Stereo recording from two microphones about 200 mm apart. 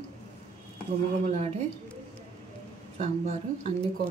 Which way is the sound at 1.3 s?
35° right (ahead or behind).